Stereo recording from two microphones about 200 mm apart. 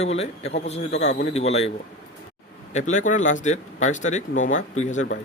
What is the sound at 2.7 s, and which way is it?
A man's voice, 35° left (ahead or behind).